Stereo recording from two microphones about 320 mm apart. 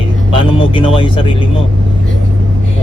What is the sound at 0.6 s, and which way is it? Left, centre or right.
Speech, centre.